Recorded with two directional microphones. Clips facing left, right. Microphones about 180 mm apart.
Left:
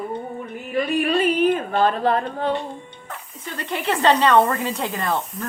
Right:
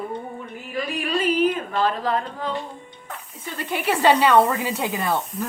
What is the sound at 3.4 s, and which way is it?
Speech, 5° right (ahead or behind).